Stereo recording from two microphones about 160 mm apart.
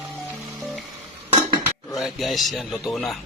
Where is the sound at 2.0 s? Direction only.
Centre (ahead or behind).